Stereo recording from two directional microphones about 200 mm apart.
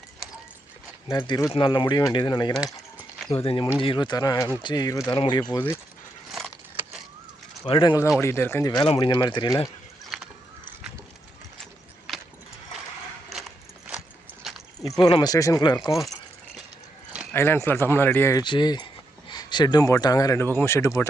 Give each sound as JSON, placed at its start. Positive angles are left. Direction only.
{"t": 1.1, "sound": "speech", "side_deg": 20}
{"t": 6.3, "sound": "keys jangling", "side_deg": 0}
{"t": 7.6, "sound": "speech", "side_deg": 25}
{"t": 10.1, "sound": "a sound", "side_deg": 0}
{"t": 11.6, "sound": "horse", "side_deg": 0}
{"t": 15.0, "sound": "speech", "side_deg": 20}
{"t": 15.9, "sound": "speech", "side_deg": 0}
{"t": 17.3, "sound": "speech", "side_deg": 10}